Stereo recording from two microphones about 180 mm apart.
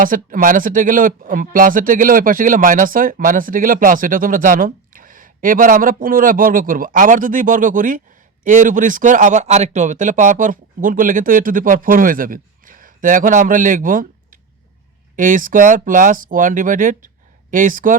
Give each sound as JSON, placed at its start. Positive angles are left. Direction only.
{"t": 0.0, "sound": "speech", "side_deg": -50}
{"t": 15.1, "sound": "speech", "side_deg": -45}